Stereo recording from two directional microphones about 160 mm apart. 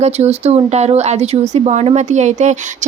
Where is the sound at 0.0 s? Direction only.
40° right (ahead or behind).